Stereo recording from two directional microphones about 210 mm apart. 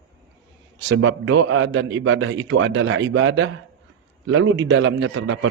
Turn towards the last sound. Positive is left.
turn(degrees=-65)  # may be behind; listen again after turning